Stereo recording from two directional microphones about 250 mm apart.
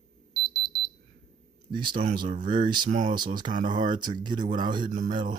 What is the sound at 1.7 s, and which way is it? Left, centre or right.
Speech, centre.